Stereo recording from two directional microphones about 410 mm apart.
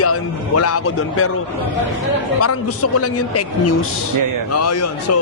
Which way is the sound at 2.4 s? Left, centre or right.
Left.